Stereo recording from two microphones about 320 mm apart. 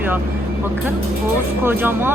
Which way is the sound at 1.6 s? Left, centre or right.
Centre.